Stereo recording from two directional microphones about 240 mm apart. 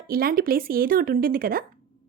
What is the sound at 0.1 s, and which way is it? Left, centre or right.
A woman's voice, right.